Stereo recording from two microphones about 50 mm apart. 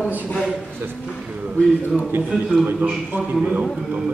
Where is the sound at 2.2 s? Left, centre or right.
Centre.